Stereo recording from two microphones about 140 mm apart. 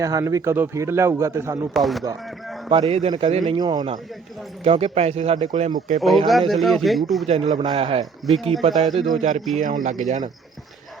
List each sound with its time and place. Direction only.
0.0 s speech: 25° right (ahead or behind)
1.7 s speech: centre (ahead or behind)
2.9 s speech: 45° right (ahead or behind)
3.4 s speech: 30° right (ahead or behind)
4.6 s speech: 45° right (ahead or behind)
5.5 s speech: 65° right (ahead or behind)
6.0 s speech: centre (ahead or behind)
7.3 s speech: 40° right (ahead or behind)
9.6 s speech: 65° right (ahead or behind)